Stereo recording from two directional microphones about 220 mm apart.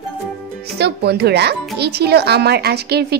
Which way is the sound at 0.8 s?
50° right (ahead or behind).